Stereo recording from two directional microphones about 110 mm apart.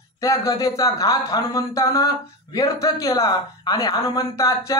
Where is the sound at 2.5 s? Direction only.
30° left (ahead or behind).